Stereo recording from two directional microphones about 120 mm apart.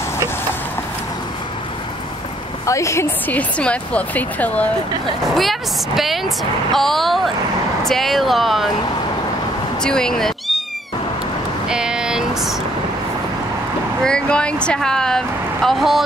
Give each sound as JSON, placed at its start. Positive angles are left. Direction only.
{"t": 2.6, "sound": "speech", "side_deg": 25}
{"t": 5.2, "sound": "a woman's voice", "side_deg": 0}
{"t": 9.8, "sound": "speech", "side_deg": 5}
{"t": 11.7, "sound": "vehicle", "side_deg": -5}
{"t": 14.0, "sound": "a woman's voice", "side_deg": 10}